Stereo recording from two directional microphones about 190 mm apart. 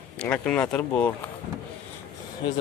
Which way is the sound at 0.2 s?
5° left (ahead or behind).